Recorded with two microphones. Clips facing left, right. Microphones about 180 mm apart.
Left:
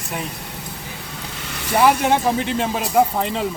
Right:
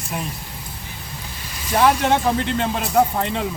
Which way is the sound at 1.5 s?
70° left (ahead or behind).